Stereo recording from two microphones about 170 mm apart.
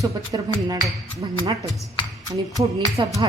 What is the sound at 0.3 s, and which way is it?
Speech, 25° right (ahead or behind).